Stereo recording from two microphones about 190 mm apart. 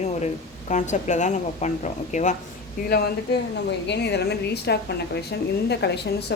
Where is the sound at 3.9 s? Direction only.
60° left (ahead or behind).